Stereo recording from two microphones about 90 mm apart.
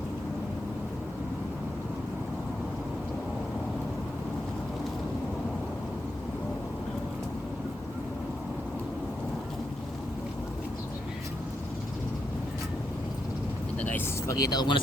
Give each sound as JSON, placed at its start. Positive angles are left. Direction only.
{"t": 14.3, "sound": "speech", "side_deg": 40}